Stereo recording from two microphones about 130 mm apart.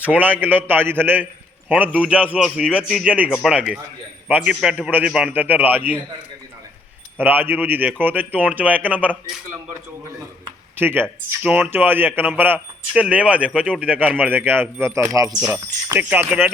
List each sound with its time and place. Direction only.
0.0 s a man's voice: 10° right (ahead or behind)
7.2 s a man's voice: 15° right (ahead or behind)
10.8 s a man's voice: 15° right (ahead or behind)
15.9 s a man's voice: 15° right (ahead or behind)